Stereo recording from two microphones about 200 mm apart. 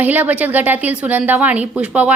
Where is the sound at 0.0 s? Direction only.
10° right (ahead or behind).